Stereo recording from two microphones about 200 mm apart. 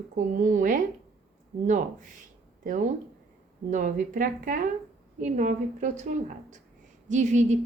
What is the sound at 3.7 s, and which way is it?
A woman's voice, 40° right (ahead or behind).